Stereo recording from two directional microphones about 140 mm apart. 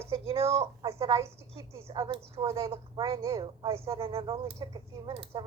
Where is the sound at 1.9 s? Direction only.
35° right (ahead or behind).